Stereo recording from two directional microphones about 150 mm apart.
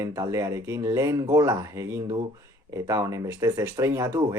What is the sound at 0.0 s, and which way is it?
Speech, 20° right (ahead or behind).